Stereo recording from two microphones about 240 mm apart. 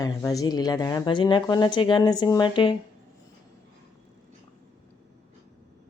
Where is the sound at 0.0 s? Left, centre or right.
Centre.